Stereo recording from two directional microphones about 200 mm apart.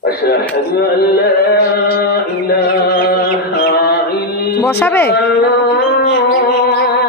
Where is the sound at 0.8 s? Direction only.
50° left (ahead or behind).